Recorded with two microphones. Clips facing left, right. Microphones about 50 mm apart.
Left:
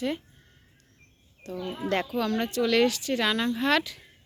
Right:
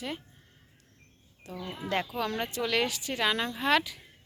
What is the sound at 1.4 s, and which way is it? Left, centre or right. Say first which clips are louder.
Speech: left 6 dB; centre.